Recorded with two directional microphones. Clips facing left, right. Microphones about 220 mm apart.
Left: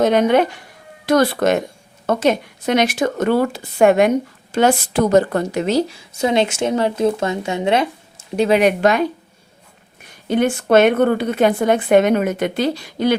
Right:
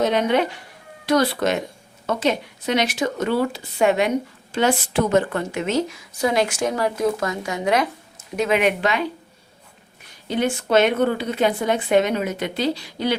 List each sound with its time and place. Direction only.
0.0 s a woman's voice: 50° left (ahead or behind)
10.2 s a woman's voice: 55° left (ahead or behind)